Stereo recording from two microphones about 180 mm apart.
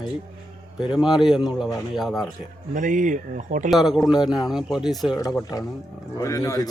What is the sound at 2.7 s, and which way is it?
Speech, 45° right (ahead or behind).